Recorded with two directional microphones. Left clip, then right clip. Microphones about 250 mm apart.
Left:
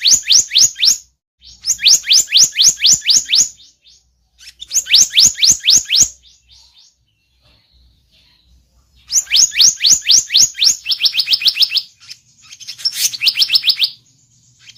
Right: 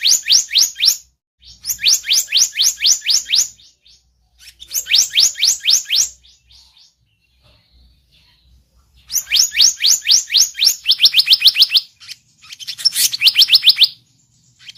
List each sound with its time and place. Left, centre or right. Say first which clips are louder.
0.3 s chirp tone: left 2 dB; centre
9.0 s chirp tone: left 3 dB; centre
10.8 s bird: right 4 dB; centre
14.6 s squawk: right 4 dB; centre